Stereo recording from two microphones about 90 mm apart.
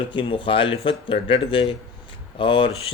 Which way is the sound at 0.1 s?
60° left (ahead or behind).